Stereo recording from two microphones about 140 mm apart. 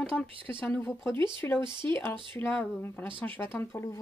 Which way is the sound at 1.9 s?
15° left (ahead or behind).